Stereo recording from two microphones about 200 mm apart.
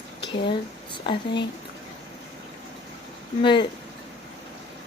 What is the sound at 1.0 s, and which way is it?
Speech, 25° left (ahead or behind).